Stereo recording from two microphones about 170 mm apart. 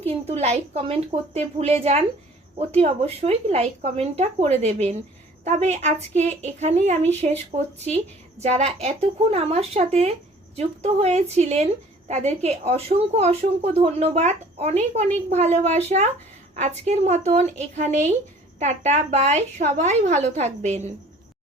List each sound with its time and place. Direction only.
0.3 s a woman's voice: 40° right (ahead or behind)